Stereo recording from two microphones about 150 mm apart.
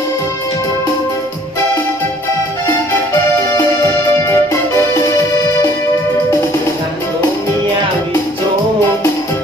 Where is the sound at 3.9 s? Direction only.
20° left (ahead or behind).